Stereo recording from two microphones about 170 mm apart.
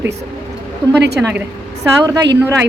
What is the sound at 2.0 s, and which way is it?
Speech, 20° right (ahead or behind).